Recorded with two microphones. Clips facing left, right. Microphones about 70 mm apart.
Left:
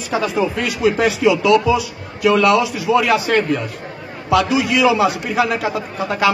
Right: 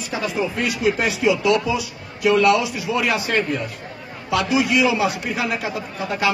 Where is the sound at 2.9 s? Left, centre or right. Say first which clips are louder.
Left 6 dB; left.